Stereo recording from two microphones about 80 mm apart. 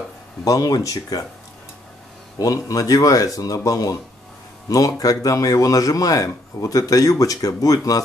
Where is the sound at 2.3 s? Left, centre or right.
Left.